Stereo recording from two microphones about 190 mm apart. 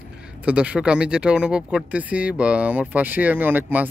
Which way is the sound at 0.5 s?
5° right (ahead or behind).